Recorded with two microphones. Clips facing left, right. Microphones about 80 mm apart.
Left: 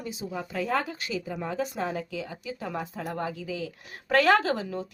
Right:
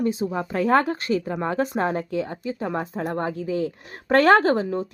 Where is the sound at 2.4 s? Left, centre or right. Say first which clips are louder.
Right 7 dB; right.